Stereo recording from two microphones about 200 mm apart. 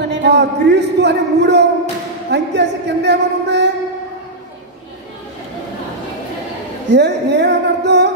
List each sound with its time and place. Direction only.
0.0 s a man's voice: 55° right (ahead or behind)
6.9 s speech: 55° right (ahead or behind)